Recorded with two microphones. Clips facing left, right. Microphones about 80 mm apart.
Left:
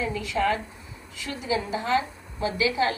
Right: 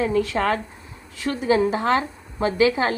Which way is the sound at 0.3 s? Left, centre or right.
Right.